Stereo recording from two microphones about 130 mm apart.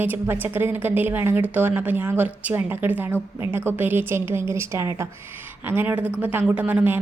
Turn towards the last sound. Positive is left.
turn(degrees=-10)  # may be behind; listen again after turning